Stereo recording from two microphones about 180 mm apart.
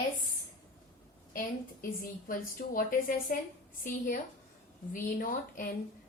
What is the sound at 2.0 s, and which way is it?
A woman's voice, 50° left (ahead or behind).